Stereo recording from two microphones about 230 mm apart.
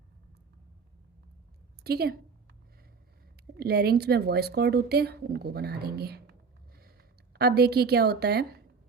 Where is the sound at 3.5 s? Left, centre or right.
Right.